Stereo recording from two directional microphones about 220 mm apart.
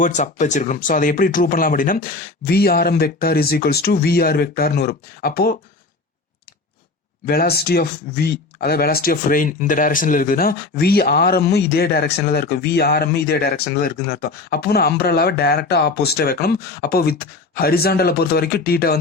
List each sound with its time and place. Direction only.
0.0 s speech: 35° left (ahead or behind)
7.3 s speech: 45° left (ahead or behind)